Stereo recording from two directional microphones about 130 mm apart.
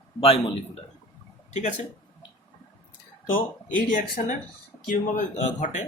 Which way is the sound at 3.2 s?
90° left.